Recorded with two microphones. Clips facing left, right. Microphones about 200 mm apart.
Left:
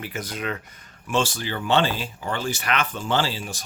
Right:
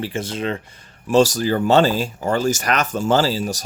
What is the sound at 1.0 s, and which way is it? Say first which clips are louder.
Speech: right 10 dB; 40° right (ahead or behind).